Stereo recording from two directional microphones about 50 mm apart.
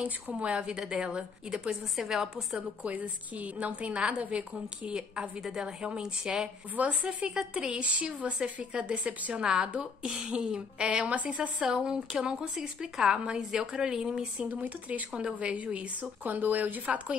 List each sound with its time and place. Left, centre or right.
0.0 s a woman's voice: right
2.0 s a woman's voice: centre
2.8 s a woman's voice: right
6.8 s a woman's voice: right
7.3 s a woman's voice: centre
11.6 s a woman's voice: centre
14.5 s speech: right